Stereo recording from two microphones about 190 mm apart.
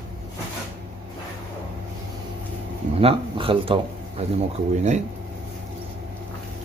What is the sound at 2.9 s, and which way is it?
Speech, 30° right (ahead or behind).